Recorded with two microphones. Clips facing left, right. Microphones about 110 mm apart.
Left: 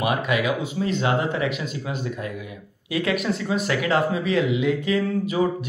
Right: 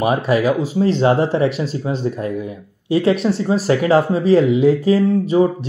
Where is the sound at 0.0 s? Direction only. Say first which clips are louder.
Right 7 dB; 35° right (ahead or behind).